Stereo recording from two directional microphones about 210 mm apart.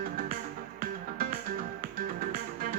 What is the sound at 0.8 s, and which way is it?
Music, 45° right (ahead or behind).